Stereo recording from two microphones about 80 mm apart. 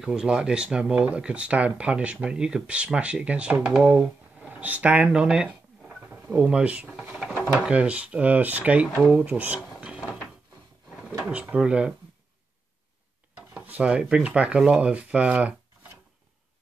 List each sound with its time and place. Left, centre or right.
0.0 s speech: centre
3.7 s a sound: centre
6.3 s speech: centre
6.9 s drawer open or close: centre
7.5 s speech: centre
9.8 s mechanisms: centre
11.2 s speech: centre
13.5 s speech: right